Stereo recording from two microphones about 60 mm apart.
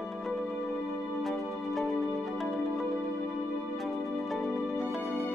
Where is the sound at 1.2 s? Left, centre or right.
Centre.